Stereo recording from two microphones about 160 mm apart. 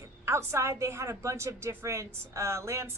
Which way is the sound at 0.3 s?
20° right (ahead or behind).